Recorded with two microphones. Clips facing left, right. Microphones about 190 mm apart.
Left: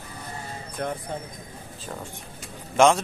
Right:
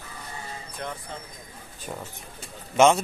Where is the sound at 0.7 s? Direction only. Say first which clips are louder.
Left 7 dB; 45° left (ahead or behind).